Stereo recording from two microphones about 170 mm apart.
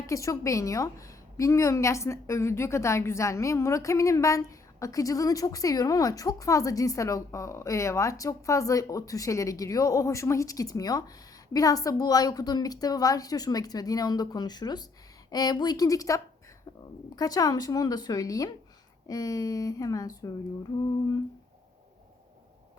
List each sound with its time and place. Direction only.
0.1 s a woman's voice: 20° left (ahead or behind)